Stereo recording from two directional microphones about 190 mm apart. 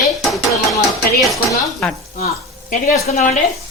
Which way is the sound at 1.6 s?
Centre (ahead or behind).